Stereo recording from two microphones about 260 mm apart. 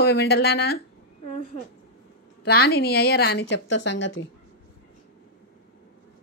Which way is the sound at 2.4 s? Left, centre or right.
Left.